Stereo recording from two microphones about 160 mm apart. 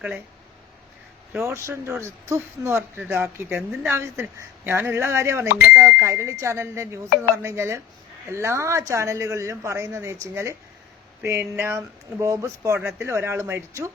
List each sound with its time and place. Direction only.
1.5 s speech: 15° right (ahead or behind)